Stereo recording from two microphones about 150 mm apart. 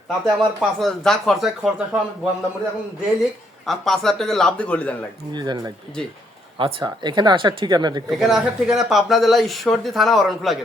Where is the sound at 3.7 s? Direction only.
Centre (ahead or behind).